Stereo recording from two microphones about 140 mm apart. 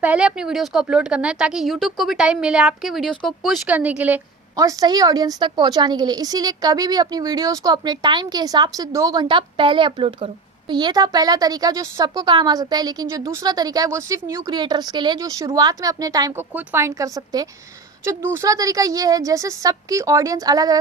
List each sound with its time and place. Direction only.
0.0 s speech: 10° right (ahead or behind)
3.7 s speech: 10° right (ahead or behind)
4.5 s a woman's voice: 25° right (ahead or behind)
16.4 s a woman's voice: 15° right (ahead or behind)